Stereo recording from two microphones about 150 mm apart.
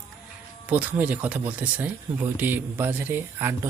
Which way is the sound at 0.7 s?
10° right (ahead or behind).